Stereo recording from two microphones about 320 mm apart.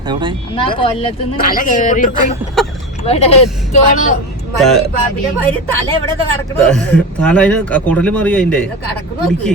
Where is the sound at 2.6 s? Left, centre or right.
Centre.